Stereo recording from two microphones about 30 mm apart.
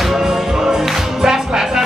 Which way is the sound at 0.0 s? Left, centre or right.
Centre.